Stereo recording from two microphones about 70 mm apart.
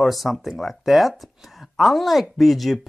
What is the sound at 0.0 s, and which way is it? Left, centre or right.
Speech, centre.